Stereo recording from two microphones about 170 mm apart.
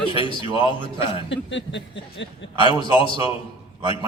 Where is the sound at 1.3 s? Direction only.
90° left.